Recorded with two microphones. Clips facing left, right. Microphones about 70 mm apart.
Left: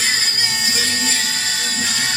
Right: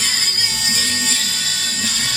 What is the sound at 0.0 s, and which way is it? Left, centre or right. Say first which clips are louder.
Music: left 3 dB; left.